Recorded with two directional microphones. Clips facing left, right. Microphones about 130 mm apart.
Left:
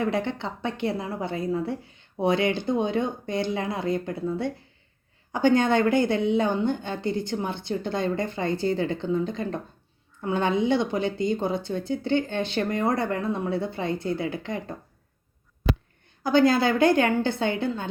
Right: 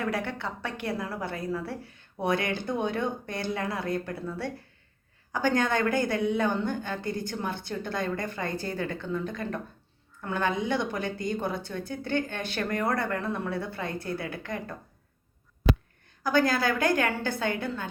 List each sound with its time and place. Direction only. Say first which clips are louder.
0.0 s a woman's voice: left 4 dB; 20° left (ahead or behind)
16.2 s a woman's voice: left 5 dB; 25° left (ahead or behind)